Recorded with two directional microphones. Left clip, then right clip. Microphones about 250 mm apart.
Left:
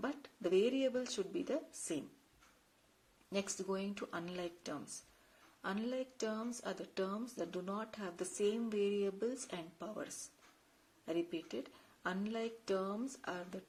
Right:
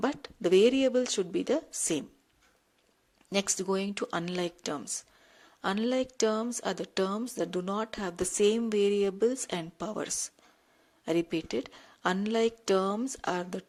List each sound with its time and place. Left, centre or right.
0.0 s a woman's voice: right
3.3 s a woman's voice: right